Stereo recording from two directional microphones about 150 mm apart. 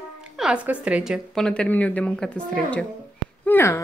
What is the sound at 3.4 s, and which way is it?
Speech, 15° left (ahead or behind).